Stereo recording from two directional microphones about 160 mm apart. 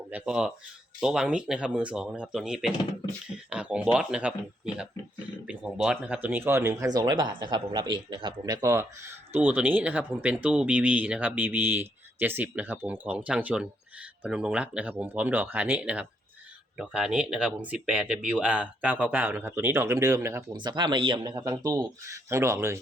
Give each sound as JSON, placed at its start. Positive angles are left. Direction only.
{"t": 0.1, "sound": "speech", "side_deg": -5}
{"t": 5.5, "sound": "speech", "side_deg": -5}
{"t": 20.6, "sound": "speech", "side_deg": -30}